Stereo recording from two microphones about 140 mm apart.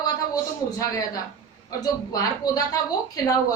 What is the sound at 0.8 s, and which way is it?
Speech, 25° left (ahead or behind).